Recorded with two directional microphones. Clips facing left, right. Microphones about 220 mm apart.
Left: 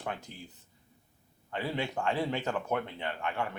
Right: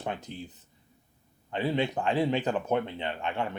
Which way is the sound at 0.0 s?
20° right (ahead or behind).